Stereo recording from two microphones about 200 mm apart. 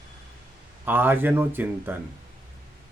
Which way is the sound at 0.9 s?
10° right (ahead or behind).